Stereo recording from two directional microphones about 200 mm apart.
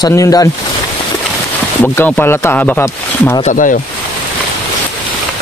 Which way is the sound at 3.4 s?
40° left (ahead or behind).